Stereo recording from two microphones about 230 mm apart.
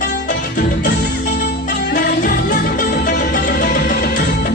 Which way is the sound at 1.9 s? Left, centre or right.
Left.